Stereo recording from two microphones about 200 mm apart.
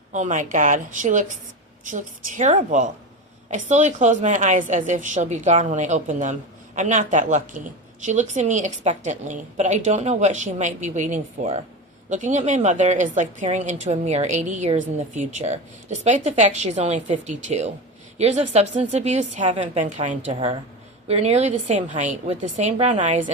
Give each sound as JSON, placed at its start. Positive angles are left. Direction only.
{"t": 0.1, "sound": "a woman's voice", "side_deg": -40}